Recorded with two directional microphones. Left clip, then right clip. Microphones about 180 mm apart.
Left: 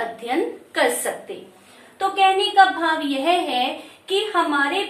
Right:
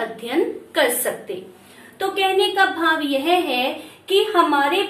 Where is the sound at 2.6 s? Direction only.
20° left (ahead or behind).